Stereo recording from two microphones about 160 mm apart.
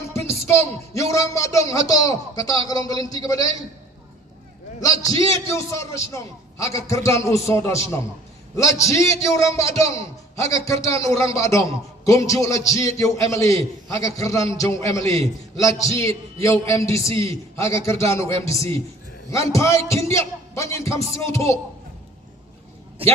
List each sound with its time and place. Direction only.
0.1 s speech: 15° left (ahead or behind)
4.8 s speech: 20° left (ahead or behind)
23.0 s a man's voice: 35° right (ahead or behind)